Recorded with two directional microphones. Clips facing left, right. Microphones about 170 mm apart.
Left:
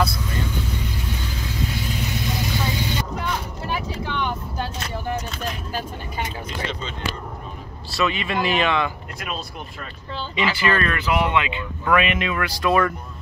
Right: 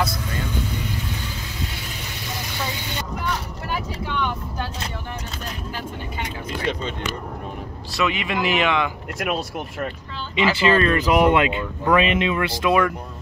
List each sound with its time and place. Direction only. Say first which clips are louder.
7.9 s speech: even; 15° right (ahead or behind)
9.2 s speech: right 7 dB; 70° right (ahead or behind)
10.3 s speech: right 4 dB; 25° right (ahead or behind)
11.0 s speech: right 5 dB; 40° right (ahead or behind)
11.8 s speech: right 2 dB; 30° right (ahead or behind); by 12.9 s 15° right (ahead or behind)